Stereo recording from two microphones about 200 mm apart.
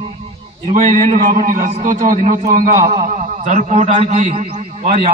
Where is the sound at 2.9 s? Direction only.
30° right (ahead or behind).